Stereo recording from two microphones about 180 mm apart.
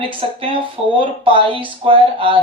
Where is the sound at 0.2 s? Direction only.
30° right (ahead or behind).